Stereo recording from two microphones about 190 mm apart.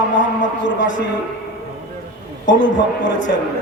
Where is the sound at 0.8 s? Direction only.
75° left (ahead or behind).